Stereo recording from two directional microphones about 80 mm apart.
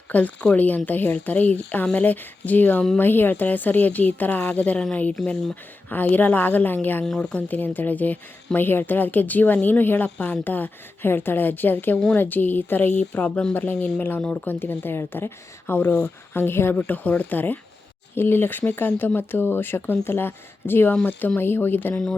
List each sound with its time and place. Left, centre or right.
0.1 s speech: centre
5.9 s speech: left
7.0 s speech: centre
7.4 s speech: left
11.9 s speech: centre
12.2 s speech: left
14.4 s speech: left